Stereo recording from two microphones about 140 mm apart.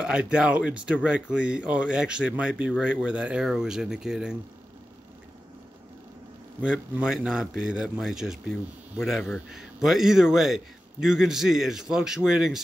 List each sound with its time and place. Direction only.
0.0 s a man's voice: 5° right (ahead or behind)
6.6 s a man's voice: 5° right (ahead or behind)